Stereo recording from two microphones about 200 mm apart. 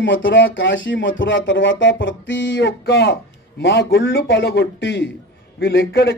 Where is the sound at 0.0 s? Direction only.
70° left (ahead or behind).